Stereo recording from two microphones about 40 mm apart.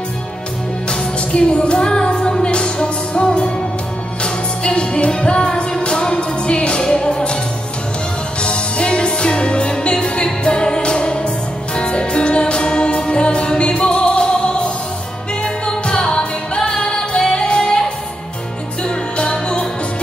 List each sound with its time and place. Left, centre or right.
0.8 s music: left
8.4 s music: left